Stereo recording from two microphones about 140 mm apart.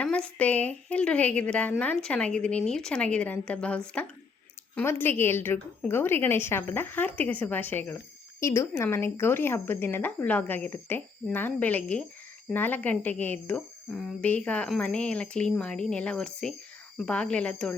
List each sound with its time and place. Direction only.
0.0 s speech: 10° left (ahead or behind)